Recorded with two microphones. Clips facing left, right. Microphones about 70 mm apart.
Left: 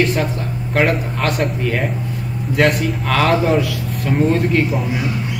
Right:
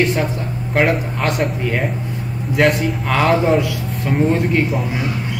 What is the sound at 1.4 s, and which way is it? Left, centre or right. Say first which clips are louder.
Speech: even; centre.